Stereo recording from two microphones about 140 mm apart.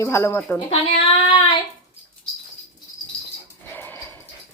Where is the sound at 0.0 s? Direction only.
20° left (ahead or behind).